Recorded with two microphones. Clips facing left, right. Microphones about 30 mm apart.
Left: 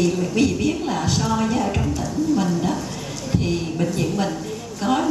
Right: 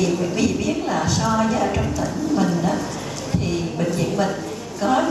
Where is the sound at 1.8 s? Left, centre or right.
Centre.